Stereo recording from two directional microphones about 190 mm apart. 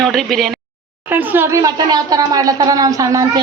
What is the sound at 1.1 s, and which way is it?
Speech, 10° right (ahead or behind).